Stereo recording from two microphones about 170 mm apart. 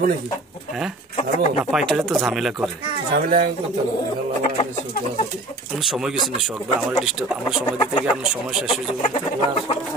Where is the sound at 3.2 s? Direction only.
60° right (ahead or behind).